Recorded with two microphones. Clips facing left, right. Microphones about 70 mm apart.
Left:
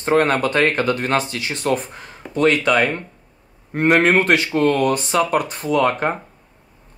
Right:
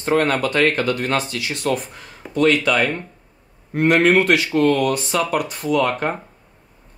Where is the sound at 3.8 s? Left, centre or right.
Left.